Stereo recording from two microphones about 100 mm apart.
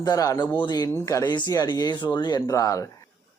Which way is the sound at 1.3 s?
45° left (ahead or behind).